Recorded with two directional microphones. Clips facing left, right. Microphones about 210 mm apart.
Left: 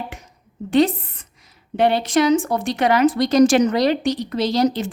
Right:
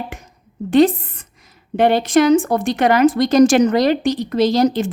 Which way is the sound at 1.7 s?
50° right (ahead or behind).